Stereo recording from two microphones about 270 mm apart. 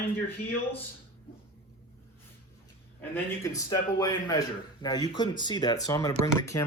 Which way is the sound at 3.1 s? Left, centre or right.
Centre.